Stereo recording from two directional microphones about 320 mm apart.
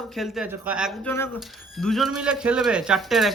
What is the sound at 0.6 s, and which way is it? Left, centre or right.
Speech, centre.